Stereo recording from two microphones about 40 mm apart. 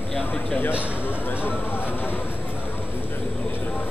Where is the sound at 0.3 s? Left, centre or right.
Left.